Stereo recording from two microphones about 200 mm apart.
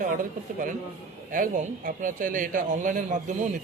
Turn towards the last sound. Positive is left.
turn(degrees=-40)  # may be behind; listen again after turning